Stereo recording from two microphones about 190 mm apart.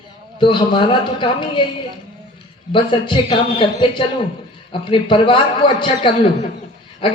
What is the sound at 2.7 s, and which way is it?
A man's voice, 25° left (ahead or behind).